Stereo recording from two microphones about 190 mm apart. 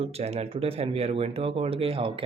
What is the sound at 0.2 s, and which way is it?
Speech, 35° right (ahead or behind).